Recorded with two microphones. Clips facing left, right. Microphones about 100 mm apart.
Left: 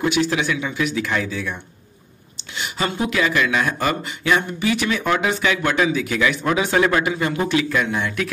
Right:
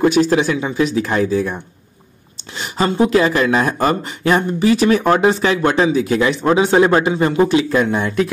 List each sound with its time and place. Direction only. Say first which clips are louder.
0.0 s speech: right 7 dB; 40° right (ahead or behind)